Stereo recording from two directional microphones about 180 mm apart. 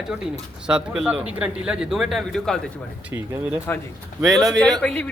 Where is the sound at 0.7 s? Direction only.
5° right (ahead or behind).